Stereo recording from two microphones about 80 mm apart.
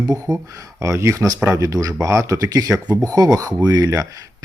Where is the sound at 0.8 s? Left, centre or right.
Right.